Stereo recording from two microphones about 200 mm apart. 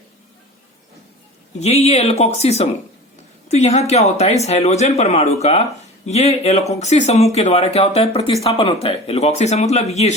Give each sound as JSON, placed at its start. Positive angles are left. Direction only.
{"t": 1.5, "sound": "speech", "side_deg": 30}